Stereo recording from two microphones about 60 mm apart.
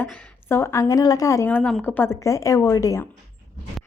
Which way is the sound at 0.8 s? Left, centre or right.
Left.